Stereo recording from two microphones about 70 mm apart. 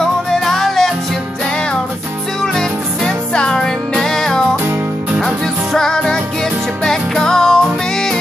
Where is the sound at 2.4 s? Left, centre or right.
Centre.